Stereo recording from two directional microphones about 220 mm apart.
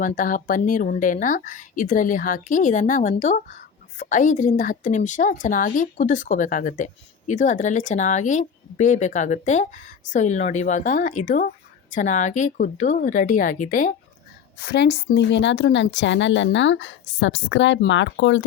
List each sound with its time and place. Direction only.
0.0 s speech: 40° left (ahead or behind)
14.6 s a woman's voice: 50° left (ahead or behind)